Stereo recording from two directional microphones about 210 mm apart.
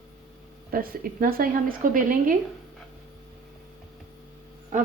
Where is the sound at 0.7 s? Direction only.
45° right (ahead or behind).